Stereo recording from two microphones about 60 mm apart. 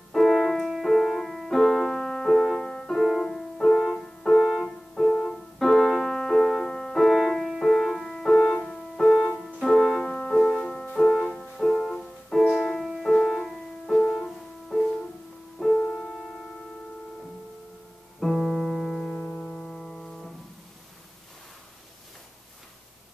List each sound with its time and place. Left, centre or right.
0.1 s music: centre
9.4 s keyboard: centre
9.8 s music: centre
18.2 s piano: centre
19.1 s music: left
19.6 s music: centre